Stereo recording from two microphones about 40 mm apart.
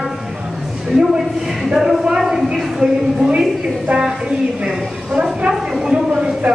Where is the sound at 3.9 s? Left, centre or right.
Right.